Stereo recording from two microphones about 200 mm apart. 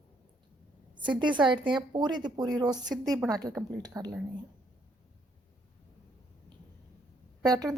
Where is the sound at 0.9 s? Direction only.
25° right (ahead or behind).